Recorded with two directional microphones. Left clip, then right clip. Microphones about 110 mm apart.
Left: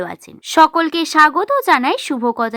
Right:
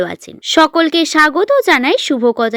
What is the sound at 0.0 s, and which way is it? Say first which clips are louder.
Speech: right 6 dB; 25° right (ahead or behind).